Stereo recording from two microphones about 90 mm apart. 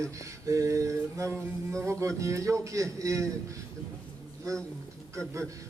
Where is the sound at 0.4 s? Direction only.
35° right (ahead or behind).